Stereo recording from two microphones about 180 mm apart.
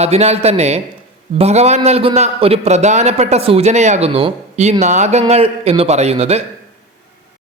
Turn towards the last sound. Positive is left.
turn(degrees=-35)  # may be behind; listen again after turning